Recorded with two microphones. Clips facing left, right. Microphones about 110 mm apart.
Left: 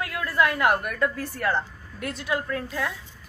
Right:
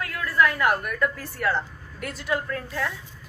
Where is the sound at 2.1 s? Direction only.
10° left (ahead or behind).